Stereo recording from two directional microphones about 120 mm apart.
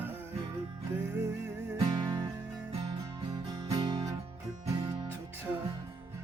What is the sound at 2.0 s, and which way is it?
Music, 35° right (ahead or behind).